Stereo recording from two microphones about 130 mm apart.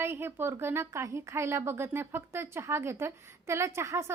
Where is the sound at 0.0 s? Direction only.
20° right (ahead or behind).